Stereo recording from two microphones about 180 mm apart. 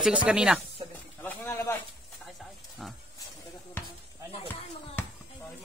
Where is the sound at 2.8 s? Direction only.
Centre (ahead or behind).